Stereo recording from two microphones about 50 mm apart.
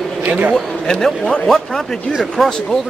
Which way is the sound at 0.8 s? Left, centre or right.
Centre.